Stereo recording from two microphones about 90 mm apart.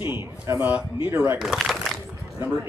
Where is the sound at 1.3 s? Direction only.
5° right (ahead or behind).